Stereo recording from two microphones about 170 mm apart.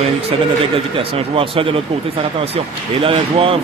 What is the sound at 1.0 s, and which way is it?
Speech, 35° right (ahead or behind).